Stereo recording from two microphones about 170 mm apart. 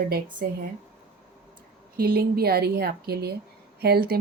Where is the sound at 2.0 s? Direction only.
60° right (ahead or behind).